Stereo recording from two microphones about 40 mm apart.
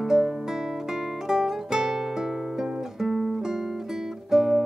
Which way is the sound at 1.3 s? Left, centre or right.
Centre.